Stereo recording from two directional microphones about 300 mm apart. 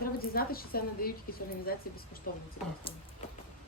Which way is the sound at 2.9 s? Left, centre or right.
Centre.